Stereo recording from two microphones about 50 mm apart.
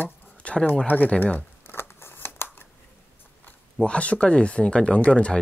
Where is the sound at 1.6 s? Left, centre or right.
Left.